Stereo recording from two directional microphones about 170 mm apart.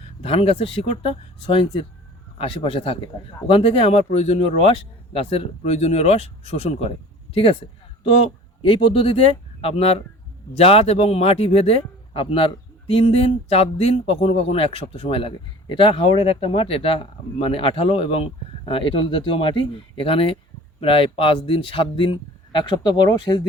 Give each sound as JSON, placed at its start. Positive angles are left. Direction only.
{"t": 0.2, "sound": "a man's voice", "side_deg": 35}